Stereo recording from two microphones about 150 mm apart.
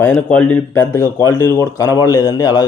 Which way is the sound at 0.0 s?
10° left (ahead or behind).